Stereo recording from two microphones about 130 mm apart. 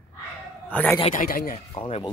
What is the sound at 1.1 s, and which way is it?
Speech, 90° left.